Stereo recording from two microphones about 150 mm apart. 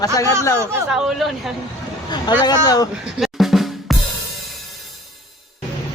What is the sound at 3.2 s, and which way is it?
Drum, centre (ahead or behind).